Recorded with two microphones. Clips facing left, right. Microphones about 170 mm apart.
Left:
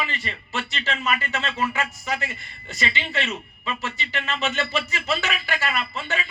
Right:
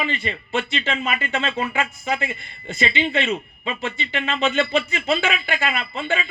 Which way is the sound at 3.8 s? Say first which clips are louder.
Right 4 dB; 50° right (ahead or behind).